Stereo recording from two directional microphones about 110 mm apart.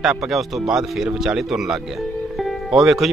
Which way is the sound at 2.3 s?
Centre (ahead or behind).